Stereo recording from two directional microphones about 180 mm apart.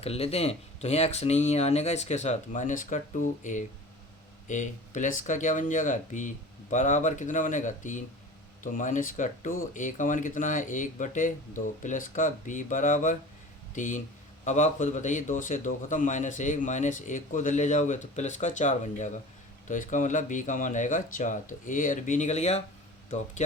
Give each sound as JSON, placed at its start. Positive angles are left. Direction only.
{"t": 0.0, "sound": "a man's voice", "side_deg": 35}